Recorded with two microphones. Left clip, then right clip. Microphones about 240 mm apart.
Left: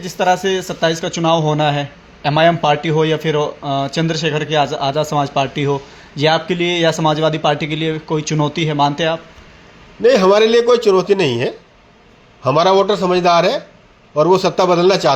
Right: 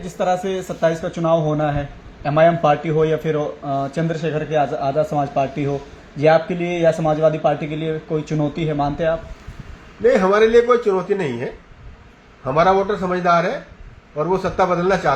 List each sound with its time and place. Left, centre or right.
0.2 s speech: left